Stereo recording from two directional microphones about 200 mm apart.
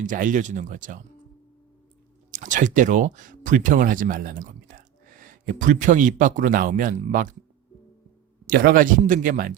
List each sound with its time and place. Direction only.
0.0 s speech: 40° right (ahead or behind)
2.3 s speech: 40° right (ahead or behind)
8.4 s speech: 45° right (ahead or behind)